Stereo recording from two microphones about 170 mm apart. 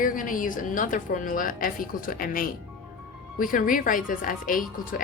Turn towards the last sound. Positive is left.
turn(degrees=55)  # may be behind; listen again after turning